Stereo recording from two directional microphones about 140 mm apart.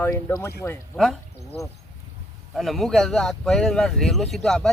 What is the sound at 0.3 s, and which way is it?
Speech, 20° left (ahead or behind).